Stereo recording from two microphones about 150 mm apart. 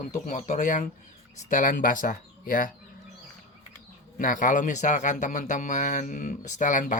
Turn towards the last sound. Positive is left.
turn(degrees=60)  # may be behind; listen again after turning